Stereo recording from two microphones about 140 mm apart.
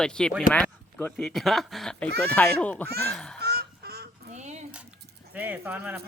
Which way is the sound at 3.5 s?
90° right.